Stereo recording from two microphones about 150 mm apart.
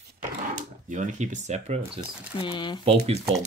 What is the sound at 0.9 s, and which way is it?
Speech, 50° right (ahead or behind).